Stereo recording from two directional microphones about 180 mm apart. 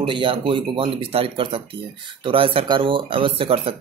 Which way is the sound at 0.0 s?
30° right (ahead or behind).